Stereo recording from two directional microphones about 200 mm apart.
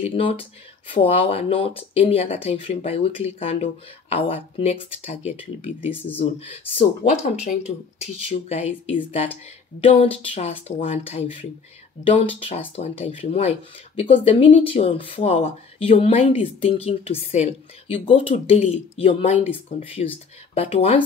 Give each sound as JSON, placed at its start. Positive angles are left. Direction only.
{"t": 0.0, "sound": "speech", "side_deg": 30}